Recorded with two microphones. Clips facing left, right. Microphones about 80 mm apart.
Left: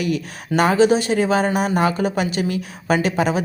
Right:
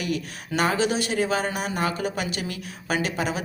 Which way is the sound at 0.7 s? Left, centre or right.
Left.